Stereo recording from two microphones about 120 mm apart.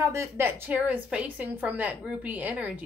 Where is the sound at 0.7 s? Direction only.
10° right (ahead or behind).